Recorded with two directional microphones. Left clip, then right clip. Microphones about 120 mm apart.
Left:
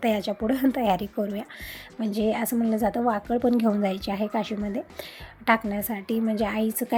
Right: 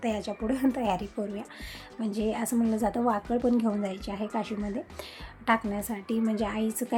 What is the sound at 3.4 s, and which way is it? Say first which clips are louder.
A woman's voice: left 4 dB; 30° left (ahead or behind).